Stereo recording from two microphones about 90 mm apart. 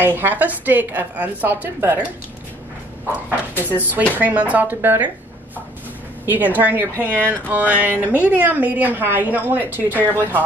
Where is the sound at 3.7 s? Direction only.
20° right (ahead or behind).